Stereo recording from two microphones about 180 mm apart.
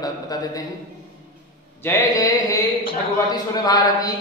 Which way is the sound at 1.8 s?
15° left (ahead or behind).